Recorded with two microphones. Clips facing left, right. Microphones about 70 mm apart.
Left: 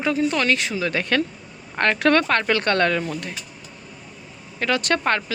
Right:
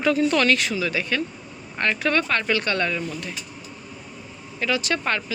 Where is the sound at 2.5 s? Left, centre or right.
Left.